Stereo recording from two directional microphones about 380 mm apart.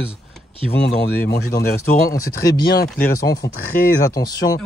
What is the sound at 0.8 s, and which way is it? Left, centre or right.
Speech, left.